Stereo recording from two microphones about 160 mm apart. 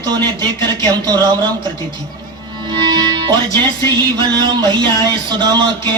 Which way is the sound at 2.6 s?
25° right (ahead or behind).